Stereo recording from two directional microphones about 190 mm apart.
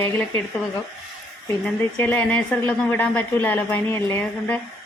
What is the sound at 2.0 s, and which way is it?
A woman's voice, 10° left (ahead or behind).